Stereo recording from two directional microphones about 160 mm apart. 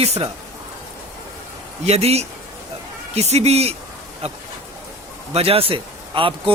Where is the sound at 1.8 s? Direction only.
40° right (ahead or behind).